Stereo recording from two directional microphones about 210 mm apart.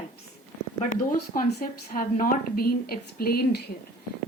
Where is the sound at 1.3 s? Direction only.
45° left (ahead or behind).